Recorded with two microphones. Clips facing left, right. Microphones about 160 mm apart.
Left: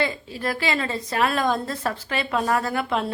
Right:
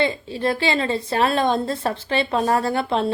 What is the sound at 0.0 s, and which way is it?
A woman's voice, 25° right (ahead or behind).